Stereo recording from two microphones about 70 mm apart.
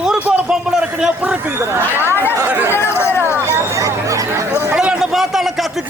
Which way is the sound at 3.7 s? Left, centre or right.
Right.